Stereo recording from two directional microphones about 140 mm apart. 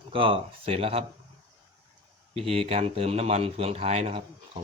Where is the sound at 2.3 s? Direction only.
45° right (ahead or behind).